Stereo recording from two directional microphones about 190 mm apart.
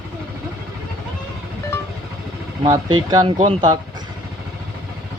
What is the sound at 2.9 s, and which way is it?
Speech, 20° right (ahead or behind).